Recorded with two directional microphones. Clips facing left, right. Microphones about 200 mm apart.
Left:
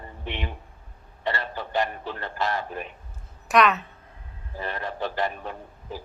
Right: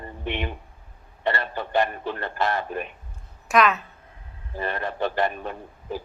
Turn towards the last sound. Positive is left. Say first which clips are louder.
# right 4 dB
turn(degrees=-60)  # may be behind; listen again after turning